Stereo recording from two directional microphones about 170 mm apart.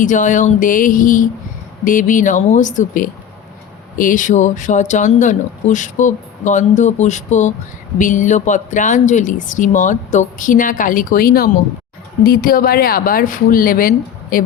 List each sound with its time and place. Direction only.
0.0 s speech: 50° left (ahead or behind)